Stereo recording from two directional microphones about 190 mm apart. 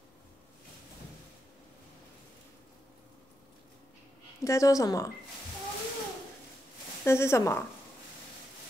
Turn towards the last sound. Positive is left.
turn(degrees=15)  # may be behind; listen again after turning